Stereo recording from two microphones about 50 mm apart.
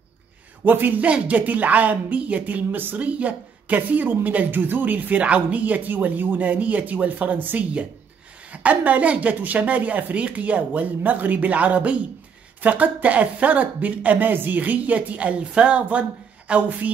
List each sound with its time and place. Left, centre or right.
0.7 s a woman's voice: right
1.0 s a woman's voice: right
3.1 s a woman's voice: right